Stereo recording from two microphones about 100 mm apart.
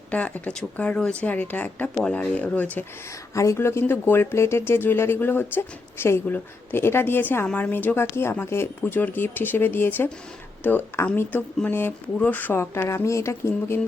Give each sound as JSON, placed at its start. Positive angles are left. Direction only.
{"t": 0.1, "sound": "speech", "side_deg": 15}
{"t": 3.3, "sound": "speech", "side_deg": 30}